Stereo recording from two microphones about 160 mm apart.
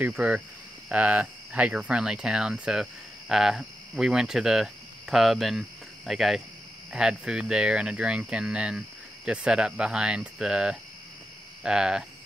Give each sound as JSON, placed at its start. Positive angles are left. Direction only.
{"t": 0.0, "sound": "speech", "side_deg": -10}